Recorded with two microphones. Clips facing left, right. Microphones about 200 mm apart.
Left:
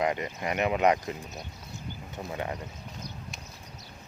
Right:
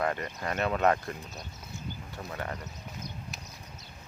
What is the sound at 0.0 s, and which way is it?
Speech, 15° left (ahead or behind).